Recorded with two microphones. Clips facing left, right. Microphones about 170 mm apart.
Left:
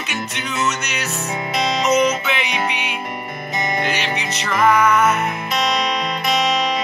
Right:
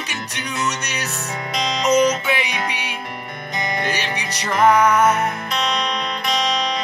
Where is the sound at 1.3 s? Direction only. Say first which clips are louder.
Left 3 dB; 5° left (ahead or behind).